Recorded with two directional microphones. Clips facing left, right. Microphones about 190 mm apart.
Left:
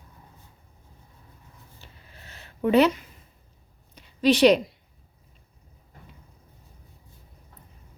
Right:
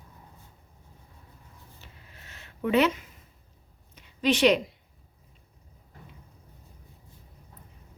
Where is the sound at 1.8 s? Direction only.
35° left (ahead or behind).